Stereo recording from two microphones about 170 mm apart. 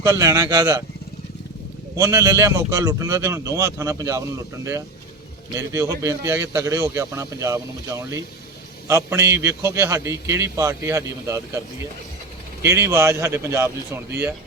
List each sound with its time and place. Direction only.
0.0 s speech: 20° right (ahead or behind)
2.0 s a man's voice: 15° right (ahead or behind)
12.6 s a man's voice: 15° right (ahead or behind)